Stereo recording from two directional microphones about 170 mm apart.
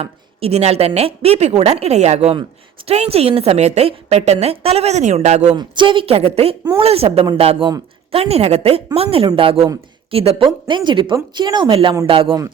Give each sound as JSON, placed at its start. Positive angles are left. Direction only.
{"t": 0.0, "sound": "a woman's voice", "side_deg": -35}
{"t": 5.5, "sound": "a woman's voice", "side_deg": -30}